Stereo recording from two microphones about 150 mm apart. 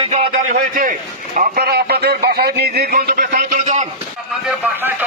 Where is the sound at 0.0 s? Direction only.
45° right (ahead or behind).